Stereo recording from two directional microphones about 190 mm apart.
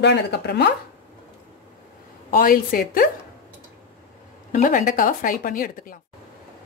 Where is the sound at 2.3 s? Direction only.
50° left (ahead or behind).